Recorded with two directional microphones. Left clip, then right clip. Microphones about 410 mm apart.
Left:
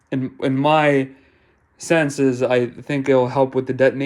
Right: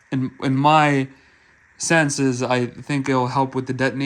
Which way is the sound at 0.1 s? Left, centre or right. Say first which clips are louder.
Left 2 dB; centre.